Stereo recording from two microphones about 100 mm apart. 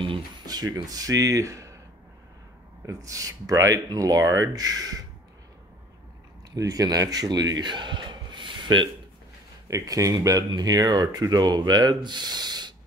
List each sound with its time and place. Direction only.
0.5 s speech: 40° right (ahead or behind)
2.9 s speech: 35° right (ahead or behind)
6.5 s a man's voice: 35° right (ahead or behind)
9.7 s speech: 35° right (ahead or behind)